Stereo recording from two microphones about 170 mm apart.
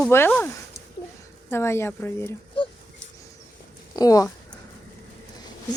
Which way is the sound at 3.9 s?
20° left (ahead or behind).